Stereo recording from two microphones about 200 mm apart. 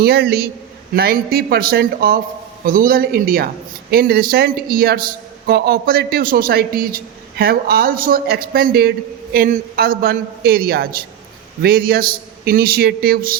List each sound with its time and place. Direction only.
0.0 s a man's voice: 50° right (ahead or behind)